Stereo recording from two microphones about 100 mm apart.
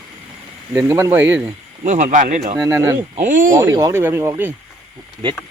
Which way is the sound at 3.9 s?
25° right (ahead or behind).